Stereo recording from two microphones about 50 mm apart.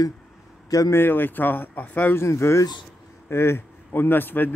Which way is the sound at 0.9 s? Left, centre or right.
Left.